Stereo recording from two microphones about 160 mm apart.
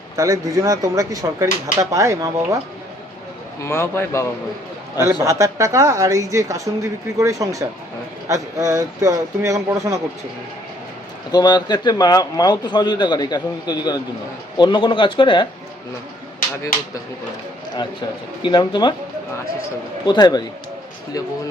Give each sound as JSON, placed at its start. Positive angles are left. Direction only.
{"t": 0.2, "sound": "speech", "side_deg": -20}
{"t": 3.6, "sound": "speech", "side_deg": 15}
{"t": 5.2, "sound": "speech", "side_deg": -20}
{"t": 11.3, "sound": "speech", "side_deg": 25}
{"t": 18.4, "sound": "speech", "side_deg": 30}
{"t": 20.1, "sound": "speech", "side_deg": 25}